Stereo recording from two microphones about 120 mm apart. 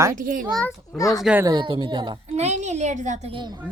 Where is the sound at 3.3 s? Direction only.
40° right (ahead or behind).